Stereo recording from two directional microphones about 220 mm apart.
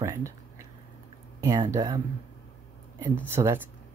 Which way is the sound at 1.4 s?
15° right (ahead or behind).